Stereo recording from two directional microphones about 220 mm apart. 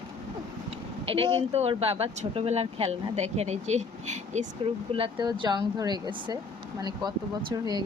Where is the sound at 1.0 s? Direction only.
25° right (ahead or behind).